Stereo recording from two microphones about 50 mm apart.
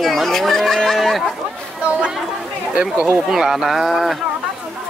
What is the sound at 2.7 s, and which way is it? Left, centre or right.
Speech, centre.